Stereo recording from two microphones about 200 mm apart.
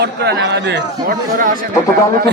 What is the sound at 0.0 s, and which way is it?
A man's voice, 55° right (ahead or behind).